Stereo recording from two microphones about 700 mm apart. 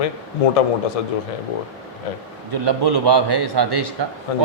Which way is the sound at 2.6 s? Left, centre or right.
Right.